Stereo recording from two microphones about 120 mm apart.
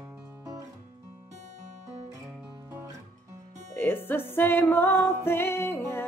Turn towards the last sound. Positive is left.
turn(degrees=20)  # may be behind; listen again after turning